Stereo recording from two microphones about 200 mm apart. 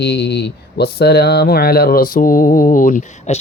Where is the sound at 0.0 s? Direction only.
55° left (ahead or behind).